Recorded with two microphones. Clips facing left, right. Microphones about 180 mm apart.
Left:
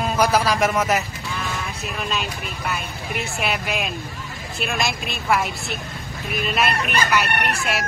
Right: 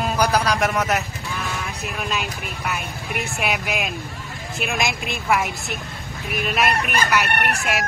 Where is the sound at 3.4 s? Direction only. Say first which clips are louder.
Even; 10° right (ahead or behind).